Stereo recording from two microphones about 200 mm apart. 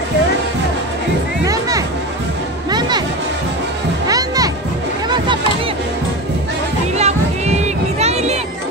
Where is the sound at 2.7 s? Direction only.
20° right (ahead or behind).